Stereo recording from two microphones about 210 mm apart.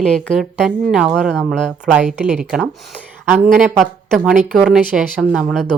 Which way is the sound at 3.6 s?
5° left (ahead or behind).